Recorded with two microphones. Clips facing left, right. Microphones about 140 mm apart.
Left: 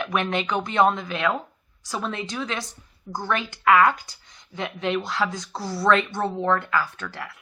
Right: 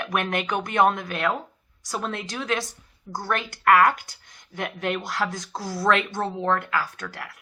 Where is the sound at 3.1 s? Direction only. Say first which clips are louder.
Left 1 dB; 15° left (ahead or behind).